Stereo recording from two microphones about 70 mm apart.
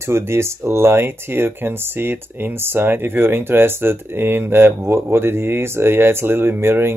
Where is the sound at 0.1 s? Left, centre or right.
Right.